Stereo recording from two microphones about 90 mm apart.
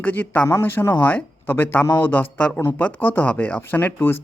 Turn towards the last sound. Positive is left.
turn(degrees=25)  # may be behind; listen again after turning